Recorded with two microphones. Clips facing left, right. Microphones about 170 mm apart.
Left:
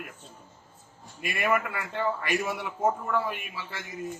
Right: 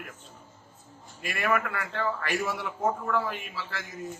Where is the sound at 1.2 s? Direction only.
15° left (ahead or behind).